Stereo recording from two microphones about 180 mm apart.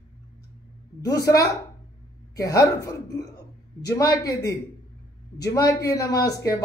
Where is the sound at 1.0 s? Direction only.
20° left (ahead or behind).